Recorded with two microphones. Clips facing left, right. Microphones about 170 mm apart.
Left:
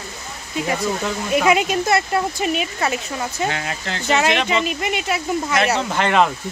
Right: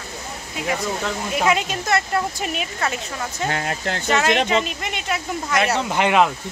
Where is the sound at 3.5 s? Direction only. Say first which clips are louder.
Right 2 dB; 45° right (ahead or behind).